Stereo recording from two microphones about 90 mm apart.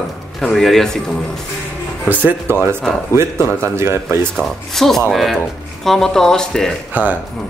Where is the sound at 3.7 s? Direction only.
30° right (ahead or behind).